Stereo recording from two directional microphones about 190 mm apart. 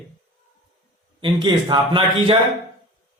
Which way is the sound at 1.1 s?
25° right (ahead or behind).